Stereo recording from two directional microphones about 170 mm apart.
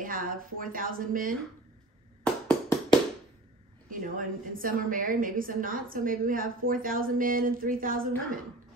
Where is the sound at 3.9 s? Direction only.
55° right (ahead or behind).